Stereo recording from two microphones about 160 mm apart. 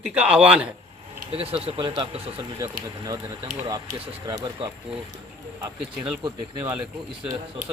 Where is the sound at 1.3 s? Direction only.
35° right (ahead or behind).